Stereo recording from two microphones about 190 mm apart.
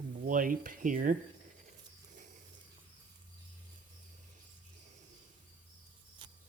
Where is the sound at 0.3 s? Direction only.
45° right (ahead or behind).